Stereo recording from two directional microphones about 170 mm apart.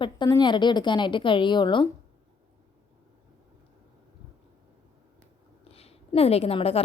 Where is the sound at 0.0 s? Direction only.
25° left (ahead or behind).